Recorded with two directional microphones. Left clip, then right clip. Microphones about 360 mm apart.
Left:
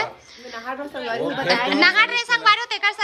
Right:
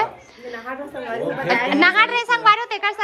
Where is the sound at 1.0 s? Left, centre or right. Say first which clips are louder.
Even; left.